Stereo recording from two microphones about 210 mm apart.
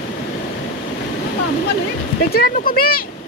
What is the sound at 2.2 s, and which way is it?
Speech, 45° left (ahead or behind).